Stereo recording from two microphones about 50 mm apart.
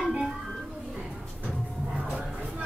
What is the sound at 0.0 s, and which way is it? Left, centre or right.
Music, centre.